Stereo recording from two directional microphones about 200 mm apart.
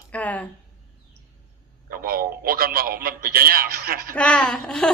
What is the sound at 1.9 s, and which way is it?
A man's voice, 50° right (ahead or behind).